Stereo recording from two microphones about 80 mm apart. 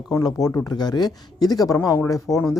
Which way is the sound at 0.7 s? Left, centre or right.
Left.